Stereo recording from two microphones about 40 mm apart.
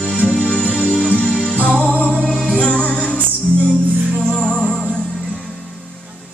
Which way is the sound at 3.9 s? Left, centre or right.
Right.